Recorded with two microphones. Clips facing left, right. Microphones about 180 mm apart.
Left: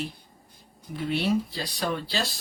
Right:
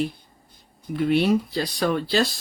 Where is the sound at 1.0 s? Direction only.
55° right (ahead or behind).